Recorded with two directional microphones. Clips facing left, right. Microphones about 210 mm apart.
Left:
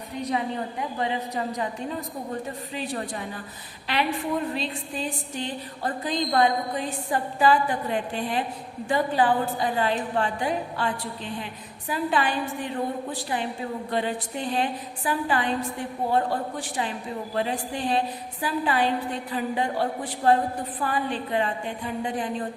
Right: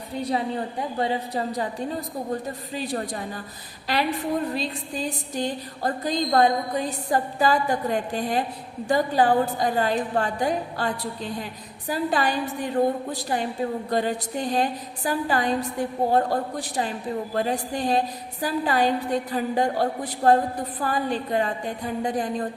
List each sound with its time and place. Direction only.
0.1 s a woman's voice: 30° right (ahead or behind)